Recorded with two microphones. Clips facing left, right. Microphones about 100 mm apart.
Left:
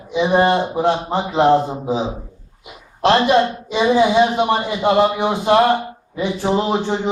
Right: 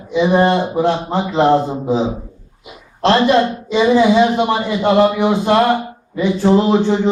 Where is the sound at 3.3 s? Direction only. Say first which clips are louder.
Right 2 dB; 10° left (ahead or behind).